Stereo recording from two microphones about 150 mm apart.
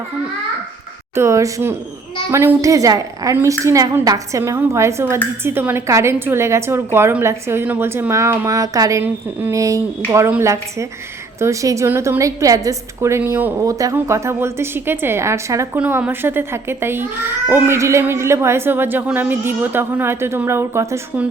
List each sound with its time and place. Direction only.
1.1 s a woman's voice: 20° right (ahead or behind)